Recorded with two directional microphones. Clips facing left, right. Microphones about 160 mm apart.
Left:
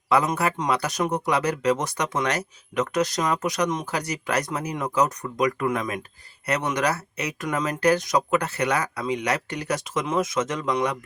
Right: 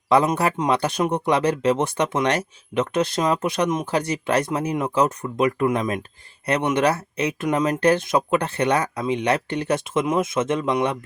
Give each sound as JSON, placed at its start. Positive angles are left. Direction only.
{"t": 0.1, "sound": "speech", "side_deg": -30}